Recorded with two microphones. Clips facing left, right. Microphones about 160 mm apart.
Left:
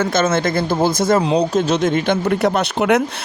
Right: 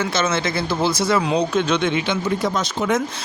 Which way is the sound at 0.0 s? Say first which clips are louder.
Left 4 dB; 50° left (ahead or behind).